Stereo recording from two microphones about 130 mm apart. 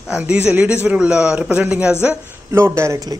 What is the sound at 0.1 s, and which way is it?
Speech, 10° right (ahead or behind).